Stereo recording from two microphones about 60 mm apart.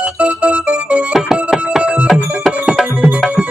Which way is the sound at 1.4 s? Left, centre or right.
Centre.